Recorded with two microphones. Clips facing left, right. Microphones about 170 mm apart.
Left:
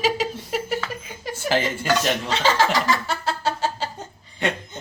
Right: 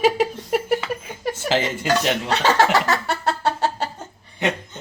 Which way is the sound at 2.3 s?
65° right (ahead or behind).